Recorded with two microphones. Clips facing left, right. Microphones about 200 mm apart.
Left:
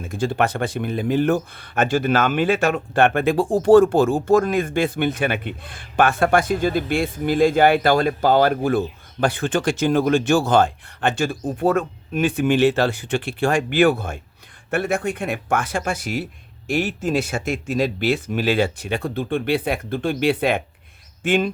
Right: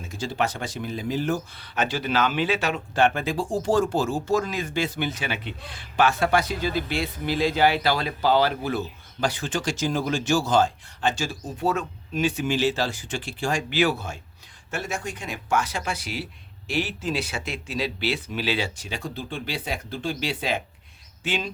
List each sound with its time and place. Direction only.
0.0 s speech: 55° left (ahead or behind)